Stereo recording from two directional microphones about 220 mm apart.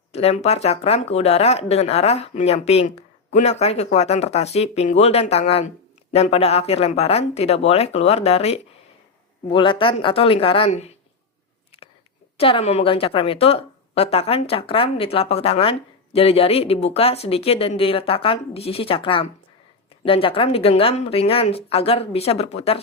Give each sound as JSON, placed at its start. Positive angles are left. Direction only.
{"t": 0.1, "sound": "a woman's voice", "side_deg": 30}
{"t": 12.4, "sound": "a woman's voice", "side_deg": 25}